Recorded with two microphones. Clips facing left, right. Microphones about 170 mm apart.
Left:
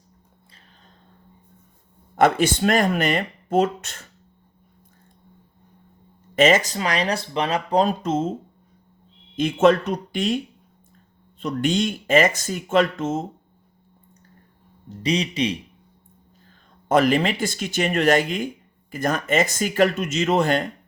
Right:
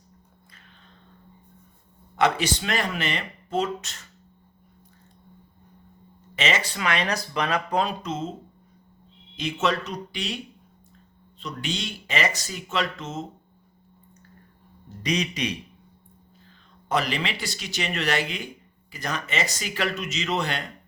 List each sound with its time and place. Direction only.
2.1 s speech: 50° left (ahead or behind)
6.3 s speech: 50° left (ahead or behind)
14.8 s speech: 30° left (ahead or behind)
16.9 s speech: 50° left (ahead or behind)